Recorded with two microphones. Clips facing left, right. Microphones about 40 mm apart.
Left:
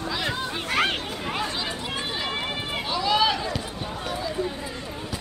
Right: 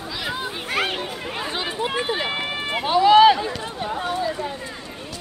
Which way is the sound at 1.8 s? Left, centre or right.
Right.